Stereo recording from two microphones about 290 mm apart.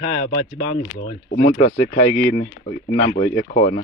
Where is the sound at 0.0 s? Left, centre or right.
Left.